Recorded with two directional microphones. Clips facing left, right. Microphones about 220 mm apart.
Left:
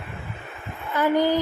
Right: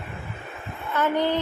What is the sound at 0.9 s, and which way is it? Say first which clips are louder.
Speech: left 3 dB; 10° left (ahead or behind).